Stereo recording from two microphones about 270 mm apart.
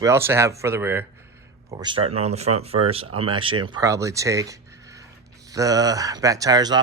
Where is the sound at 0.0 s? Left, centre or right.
Centre.